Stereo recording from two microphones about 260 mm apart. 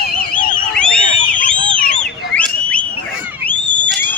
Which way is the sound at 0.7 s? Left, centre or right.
Centre.